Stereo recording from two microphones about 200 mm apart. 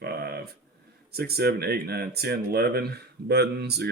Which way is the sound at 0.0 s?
50° right (ahead or behind).